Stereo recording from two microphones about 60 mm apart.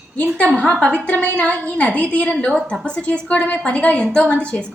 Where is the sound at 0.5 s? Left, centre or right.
Left.